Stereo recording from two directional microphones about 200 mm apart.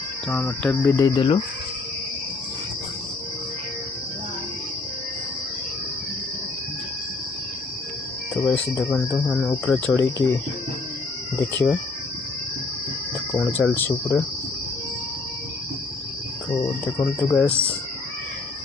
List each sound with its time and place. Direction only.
0.3 s speech: 10° left (ahead or behind); by 1.4 s 25° left (ahead or behind)
8.5 s speech: 10° left (ahead or behind)
13.5 s speech: 10° left (ahead or behind)
17.3 s speech: 5° left (ahead or behind)